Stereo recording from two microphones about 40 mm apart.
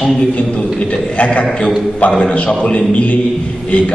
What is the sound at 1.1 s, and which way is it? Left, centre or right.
Speech, left.